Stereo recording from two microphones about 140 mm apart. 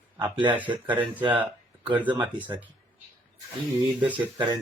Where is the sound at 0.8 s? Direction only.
10° right (ahead or behind).